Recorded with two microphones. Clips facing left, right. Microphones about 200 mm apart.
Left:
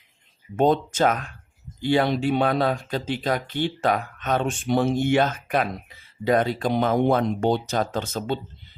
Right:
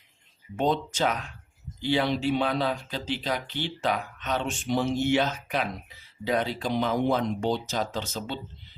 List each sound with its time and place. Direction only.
0.5 s speech: 50° left (ahead or behind)